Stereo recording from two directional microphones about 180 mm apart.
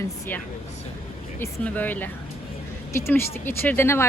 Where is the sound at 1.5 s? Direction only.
10° left (ahead or behind).